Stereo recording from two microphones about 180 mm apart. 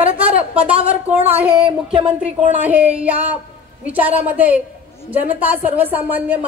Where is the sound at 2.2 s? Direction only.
10° right (ahead or behind).